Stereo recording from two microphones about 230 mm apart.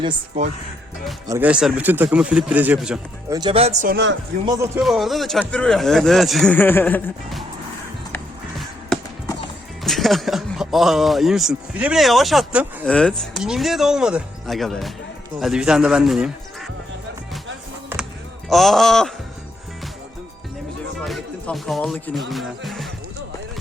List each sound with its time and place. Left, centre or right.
0.0 s speech: right
1.3 s speech: centre
3.2 s speech: centre
4.8 s speech: centre
8.1 s music: centre
9.8 s speech: centre
17.9 s basketball bounce: centre
18.4 s speech: centre
21.0 s music: centre